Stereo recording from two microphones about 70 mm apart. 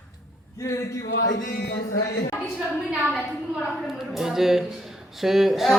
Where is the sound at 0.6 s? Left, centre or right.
Left.